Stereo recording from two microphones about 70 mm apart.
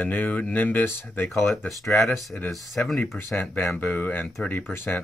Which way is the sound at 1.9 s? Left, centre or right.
Left.